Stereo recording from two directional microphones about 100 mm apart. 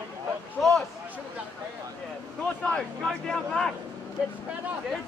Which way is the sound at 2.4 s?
10° left (ahead or behind).